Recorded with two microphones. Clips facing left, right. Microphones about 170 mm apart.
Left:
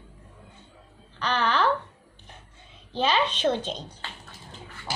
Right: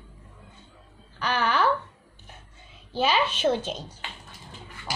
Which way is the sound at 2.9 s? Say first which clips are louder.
Even; 10° right (ahead or behind).